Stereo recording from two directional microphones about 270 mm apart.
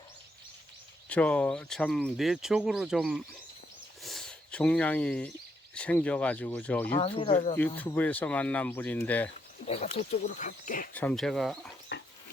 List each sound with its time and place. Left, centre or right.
1.0 s speech: centre
4.0 s a sound: centre
5.7 s speech: centre
6.9 s speech: left
7.5 s speech: centre
9.6 s speech: left
10.9 s speech: centre